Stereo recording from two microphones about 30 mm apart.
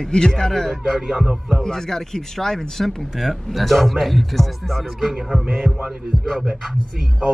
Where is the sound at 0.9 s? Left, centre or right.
Centre.